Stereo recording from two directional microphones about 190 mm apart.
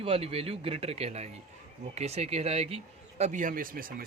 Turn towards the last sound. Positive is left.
turn(degrees=-50)  # may be behind; listen again after turning